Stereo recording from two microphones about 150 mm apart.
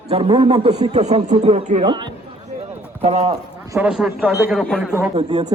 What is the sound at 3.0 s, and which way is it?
Speech, 45° right (ahead or behind).